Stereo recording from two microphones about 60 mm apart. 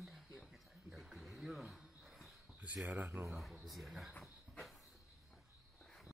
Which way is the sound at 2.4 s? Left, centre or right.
Right.